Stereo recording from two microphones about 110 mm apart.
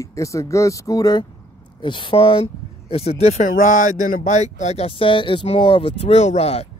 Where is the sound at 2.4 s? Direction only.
70° left (ahead or behind).